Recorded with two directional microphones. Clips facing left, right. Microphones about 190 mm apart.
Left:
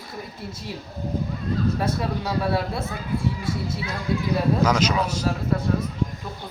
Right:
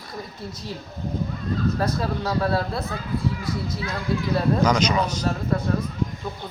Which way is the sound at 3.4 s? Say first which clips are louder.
Even; 25° left (ahead or behind).